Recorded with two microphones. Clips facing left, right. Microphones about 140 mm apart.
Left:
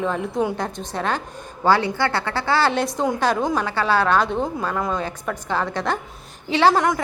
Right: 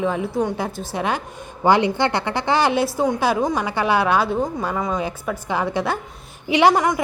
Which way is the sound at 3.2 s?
10° right (ahead or behind).